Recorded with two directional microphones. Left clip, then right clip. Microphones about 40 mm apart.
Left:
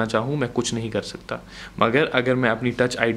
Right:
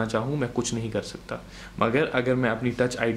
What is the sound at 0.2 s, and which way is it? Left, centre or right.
Speech, left.